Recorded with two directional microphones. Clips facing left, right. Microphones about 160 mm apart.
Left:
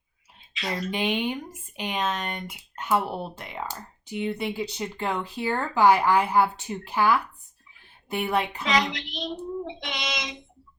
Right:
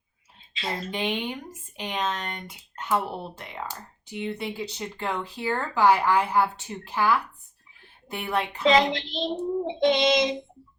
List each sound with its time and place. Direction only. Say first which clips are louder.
0.5 s speech: left 1 dB; 25° right (ahead or behind)
0.9 s speech: left 4 dB; 10° left (ahead or behind)
8.1 s speech: left 2 dB; 15° left (ahead or behind)
8.6 s speech: right 5 dB; 25° right (ahead or behind)